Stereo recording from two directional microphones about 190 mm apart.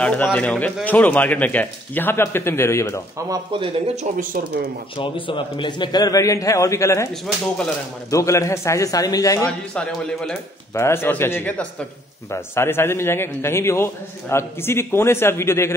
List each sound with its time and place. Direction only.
0.0 s a man's voice: 10° left (ahead or behind)
3.3 s speech: 25° right (ahead or behind)
4.9 s a man's voice: 25° left (ahead or behind)
8.1 s a man's voice: 15° left (ahead or behind)
9.8 s a man's voice: 5° left (ahead or behind)